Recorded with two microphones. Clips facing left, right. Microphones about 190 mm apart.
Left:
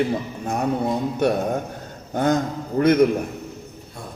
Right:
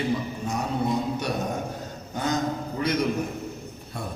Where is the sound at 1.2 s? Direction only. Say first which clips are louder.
Left 10 dB; 55° left (ahead or behind).